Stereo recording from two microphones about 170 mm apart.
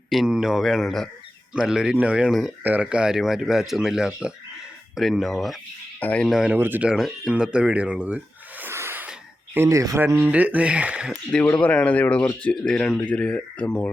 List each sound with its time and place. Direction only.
0.1 s speech: centre (ahead or behind)
6.2 s speech: 5° right (ahead or behind)
11.3 s speech: 5° left (ahead or behind)